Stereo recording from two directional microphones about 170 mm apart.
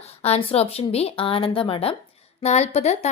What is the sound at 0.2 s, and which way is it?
Speech, 35° left (ahead or behind).